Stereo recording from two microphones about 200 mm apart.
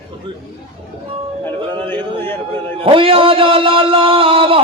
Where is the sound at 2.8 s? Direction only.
25° right (ahead or behind).